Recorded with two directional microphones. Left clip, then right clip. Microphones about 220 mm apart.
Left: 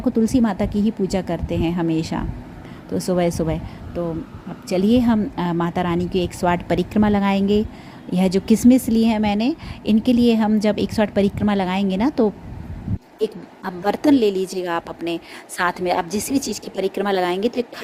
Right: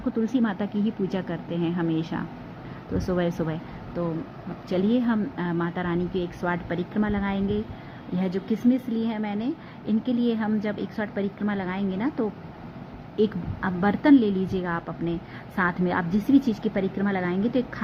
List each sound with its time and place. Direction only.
0.2 s a woman's voice: 25° left (ahead or behind)